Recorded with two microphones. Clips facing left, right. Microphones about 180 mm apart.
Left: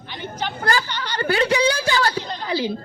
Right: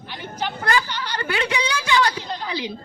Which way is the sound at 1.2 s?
35° left (ahead or behind).